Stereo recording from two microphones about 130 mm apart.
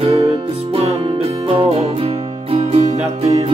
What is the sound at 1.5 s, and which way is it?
Music, 45° right (ahead or behind).